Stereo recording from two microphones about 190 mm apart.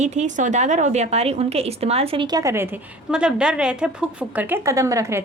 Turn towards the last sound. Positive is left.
turn(degrees=-15)  # may be behind; listen again after turning